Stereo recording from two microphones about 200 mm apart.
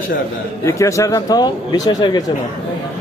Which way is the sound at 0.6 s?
15° left (ahead or behind).